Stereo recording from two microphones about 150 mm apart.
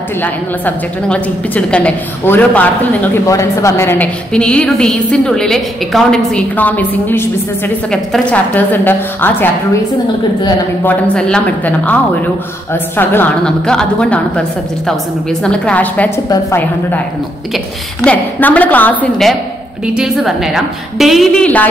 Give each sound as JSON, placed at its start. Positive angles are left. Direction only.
{"t": 0.2, "sound": "a woman's voice", "side_deg": 10}
{"t": 4.3, "sound": "a woman's voice", "side_deg": 5}
{"t": 10.8, "sound": "a woman's voice", "side_deg": 10}
{"t": 15.4, "sound": "a woman's voice", "side_deg": 5}
{"t": 18.0, "sound": "a woman's voice", "side_deg": 10}